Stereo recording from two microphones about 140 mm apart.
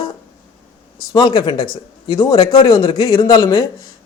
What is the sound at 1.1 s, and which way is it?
A man's voice, 30° left (ahead or behind).